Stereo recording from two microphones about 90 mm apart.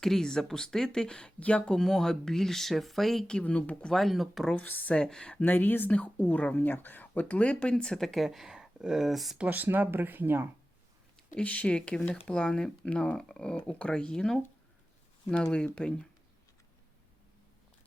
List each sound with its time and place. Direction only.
0.0 s speech: 5° left (ahead or behind)
4.5 s speech: 20° left (ahead or behind); by 9.4 s centre (ahead or behind)
9.4 s speech: 20° right (ahead or behind)
11.2 s speech: 15° left (ahead or behind)